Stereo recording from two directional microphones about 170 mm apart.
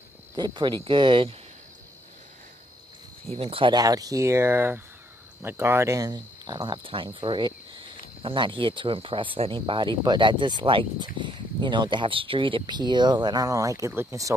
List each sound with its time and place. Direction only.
0.4 s speech: 25° right (ahead or behind)
3.3 s speech: 35° right (ahead or behind); by 14.3 s 20° right (ahead or behind)